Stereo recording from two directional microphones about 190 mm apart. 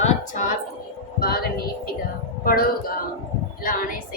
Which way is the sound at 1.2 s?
55° left (ahead or behind).